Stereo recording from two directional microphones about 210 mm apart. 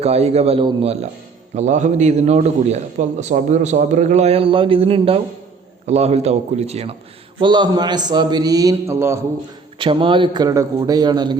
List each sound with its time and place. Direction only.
0.0 s a man's voice: 30° right (ahead or behind); by 9.2 s 10° right (ahead or behind)
9.7 s a man's voice: 25° right (ahead or behind)